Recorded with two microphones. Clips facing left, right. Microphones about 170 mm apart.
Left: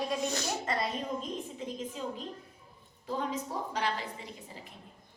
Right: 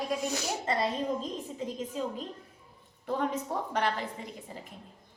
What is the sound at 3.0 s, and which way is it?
A woman's voice, 55° right (ahead or behind).